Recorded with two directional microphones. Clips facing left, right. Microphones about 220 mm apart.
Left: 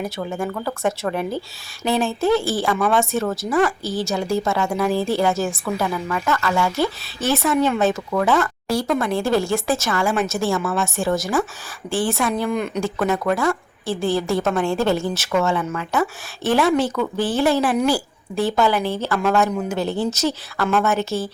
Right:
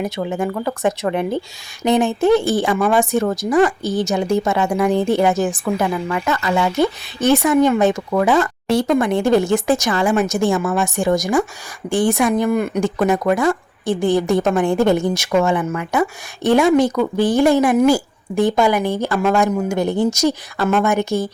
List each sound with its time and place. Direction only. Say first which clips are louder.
0.0 s speech: right 4 dB; 15° right (ahead or behind)